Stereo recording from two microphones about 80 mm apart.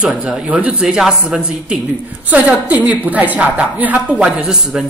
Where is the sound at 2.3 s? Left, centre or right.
Centre.